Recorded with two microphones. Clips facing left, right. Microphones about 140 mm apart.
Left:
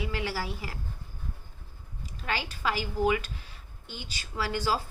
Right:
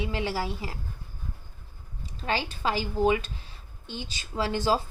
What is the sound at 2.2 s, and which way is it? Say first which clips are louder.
A woman's voice: right 3 dB; 30° right (ahead or behind).